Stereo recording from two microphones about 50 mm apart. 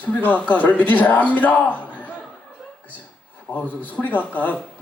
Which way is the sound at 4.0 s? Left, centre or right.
Left.